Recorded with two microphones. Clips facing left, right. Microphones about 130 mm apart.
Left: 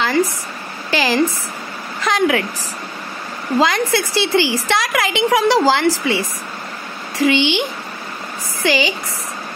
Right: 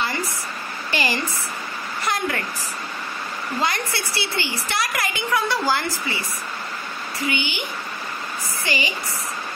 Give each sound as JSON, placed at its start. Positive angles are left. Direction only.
{"t": 0.0, "sound": "a sound", "side_deg": 90}
{"t": 0.8, "sound": "a woman's voice", "side_deg": 90}
{"t": 3.5, "sound": "a woman's voice", "side_deg": 90}
{"t": 8.6, "sound": "a woman's voice", "side_deg": 90}